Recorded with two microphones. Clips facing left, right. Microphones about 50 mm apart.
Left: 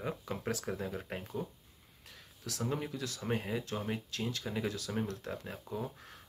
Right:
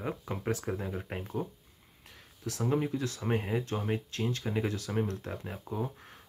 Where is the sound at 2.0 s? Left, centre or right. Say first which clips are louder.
Right 6 dB; right.